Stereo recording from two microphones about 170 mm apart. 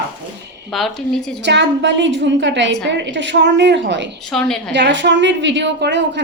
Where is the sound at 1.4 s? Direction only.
90° right.